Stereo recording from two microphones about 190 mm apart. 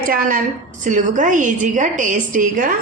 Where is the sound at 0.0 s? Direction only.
45° right (ahead or behind).